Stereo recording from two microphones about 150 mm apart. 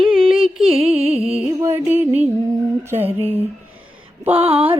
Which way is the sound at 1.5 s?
15° right (ahead or behind).